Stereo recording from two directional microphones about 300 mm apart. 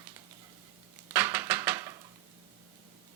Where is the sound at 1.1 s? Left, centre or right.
Centre.